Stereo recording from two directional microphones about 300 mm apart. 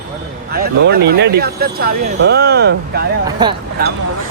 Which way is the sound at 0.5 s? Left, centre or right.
Right.